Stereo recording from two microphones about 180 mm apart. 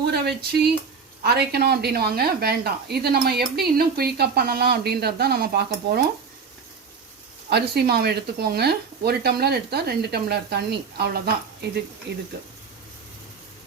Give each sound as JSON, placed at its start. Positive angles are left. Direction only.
{"t": 0.0, "sound": "speech", "side_deg": -65}
{"t": 7.5, "sound": "speech", "side_deg": -60}